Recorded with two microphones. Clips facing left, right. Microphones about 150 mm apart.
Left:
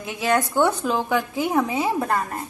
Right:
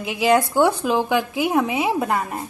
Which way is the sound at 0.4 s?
10° right (ahead or behind).